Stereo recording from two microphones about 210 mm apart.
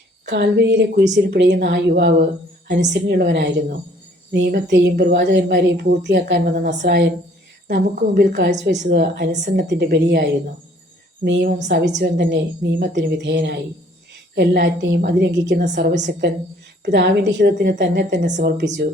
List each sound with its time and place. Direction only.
0.3 s a woman's voice: 55° right (ahead or behind)
5.7 s a woman's voice: 45° right (ahead or behind)
6.1 s a woman's voice: 60° right (ahead or behind)